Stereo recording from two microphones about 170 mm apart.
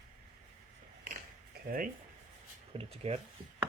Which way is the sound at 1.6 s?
55° right (ahead or behind).